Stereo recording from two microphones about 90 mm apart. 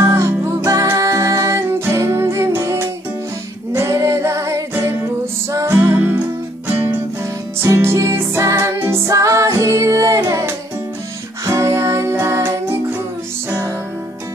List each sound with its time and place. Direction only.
0.0 s music: 35° right (ahead or behind)
3.7 s singing: 35° right (ahead or behind)
5.5 s music: 35° right (ahead or behind)
7.6 s music: 35° right (ahead or behind)
11.4 s music: 35° right (ahead or behind)